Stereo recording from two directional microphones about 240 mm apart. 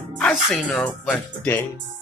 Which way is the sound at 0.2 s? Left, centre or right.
Centre.